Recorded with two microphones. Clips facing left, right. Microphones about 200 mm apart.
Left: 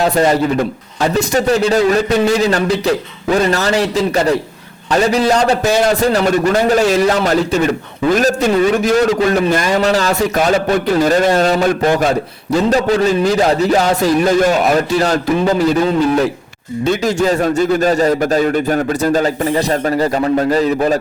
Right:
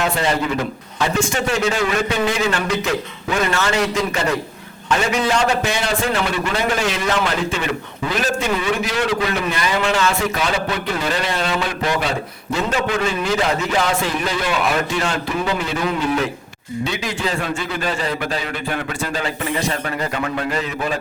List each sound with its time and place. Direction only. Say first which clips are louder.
0.0 s a man's voice: left 7 dB; 40° left (ahead or behind)